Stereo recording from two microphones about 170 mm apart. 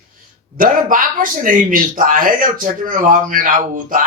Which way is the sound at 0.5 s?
55° right (ahead or behind).